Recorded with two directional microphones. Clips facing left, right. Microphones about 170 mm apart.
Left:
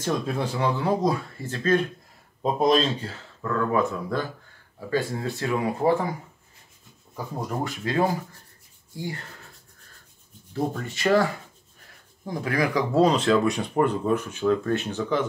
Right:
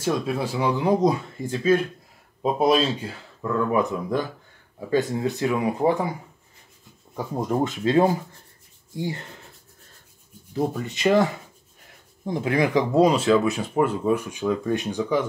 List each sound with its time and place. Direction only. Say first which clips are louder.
0.0 s speech: right 2 dB; 5° right (ahead or behind)
7.3 s speech: right 6 dB; 20° right (ahead or behind)
10.5 s speech: right 2 dB; 15° right (ahead or behind)